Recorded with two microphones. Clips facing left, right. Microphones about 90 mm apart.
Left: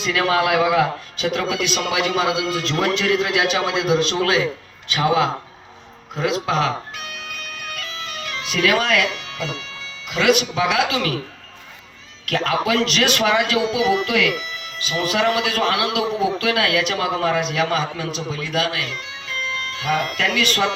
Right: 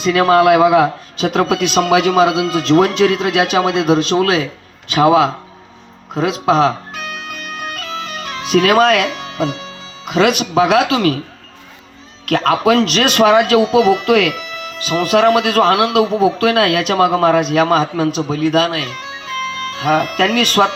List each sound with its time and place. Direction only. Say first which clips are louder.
0.0 s a man's voice: right 8 dB; 45° right (ahead or behind)
6.5 s music: right 8 dB; 35° right (ahead or behind)
10.1 s a man's voice: right 4 dB; 45° right (ahead or behind)
12.2 s a man's voice: right 7 dB; 50° right (ahead or behind)